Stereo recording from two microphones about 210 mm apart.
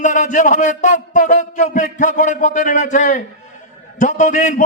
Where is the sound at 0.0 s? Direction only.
35° left (ahead or behind).